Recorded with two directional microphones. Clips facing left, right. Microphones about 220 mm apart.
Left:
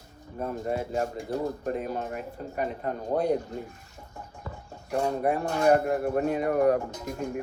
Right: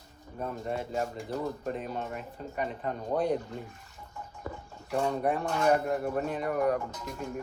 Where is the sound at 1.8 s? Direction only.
45° left (ahead or behind).